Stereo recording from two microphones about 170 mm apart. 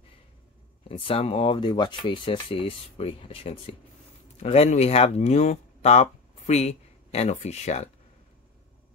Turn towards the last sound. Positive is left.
turn(degrees=40)  # may be behind; listen again after turning